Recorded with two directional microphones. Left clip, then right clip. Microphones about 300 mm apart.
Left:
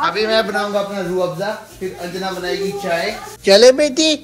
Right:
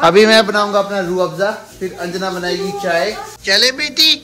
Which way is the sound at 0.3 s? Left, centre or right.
Right.